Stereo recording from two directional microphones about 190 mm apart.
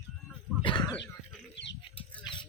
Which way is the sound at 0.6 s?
25° left (ahead or behind).